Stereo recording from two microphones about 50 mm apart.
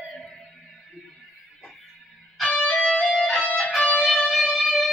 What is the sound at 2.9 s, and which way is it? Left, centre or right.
Music, left.